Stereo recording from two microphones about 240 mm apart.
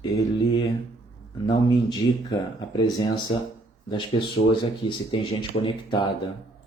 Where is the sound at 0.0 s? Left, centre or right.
Centre.